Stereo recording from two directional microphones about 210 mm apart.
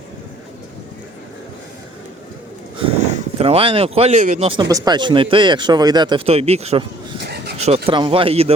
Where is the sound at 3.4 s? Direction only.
25° right (ahead or behind).